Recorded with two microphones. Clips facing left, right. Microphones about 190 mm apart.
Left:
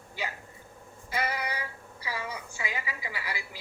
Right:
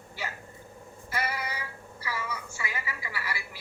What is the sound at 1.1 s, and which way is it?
Synthetic singing, 15° left (ahead or behind).